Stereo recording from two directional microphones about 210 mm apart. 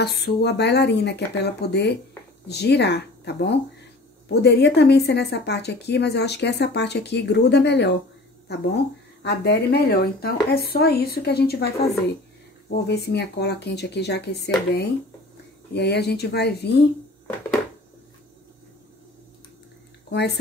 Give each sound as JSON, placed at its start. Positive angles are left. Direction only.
{"t": 0.0, "sound": "speech", "side_deg": 50}
{"t": 9.2, "sound": "speech", "side_deg": 50}
{"t": 20.1, "sound": "speech", "side_deg": 55}